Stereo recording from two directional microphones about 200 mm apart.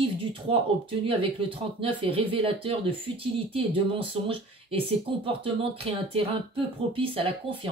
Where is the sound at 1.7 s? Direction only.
25° right (ahead or behind).